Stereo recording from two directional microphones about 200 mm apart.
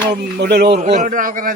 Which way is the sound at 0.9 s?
40° right (ahead or behind).